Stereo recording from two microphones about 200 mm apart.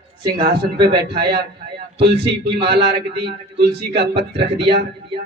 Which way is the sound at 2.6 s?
55° right (ahead or behind).